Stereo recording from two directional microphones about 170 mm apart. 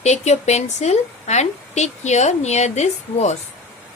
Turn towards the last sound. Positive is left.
turn(degrees=40)  # may be behind; listen again after turning